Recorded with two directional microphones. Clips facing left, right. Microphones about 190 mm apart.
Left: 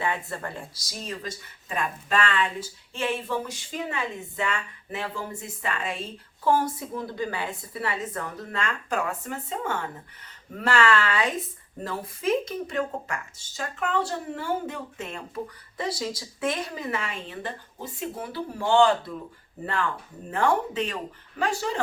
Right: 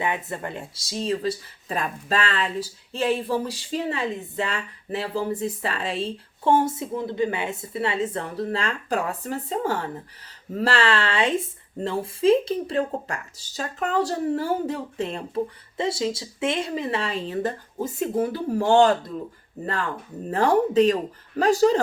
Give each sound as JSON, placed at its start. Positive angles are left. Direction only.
{"t": 0.0, "sound": "speech", "side_deg": -20}
{"t": 20.3, "sound": "speech", "side_deg": -40}